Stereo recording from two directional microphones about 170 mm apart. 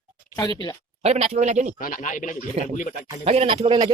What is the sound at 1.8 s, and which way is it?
Speech, 55° left (ahead or behind).